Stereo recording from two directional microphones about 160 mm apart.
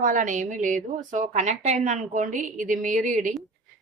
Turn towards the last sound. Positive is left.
turn(degrees=-55)  # may be behind; listen again after turning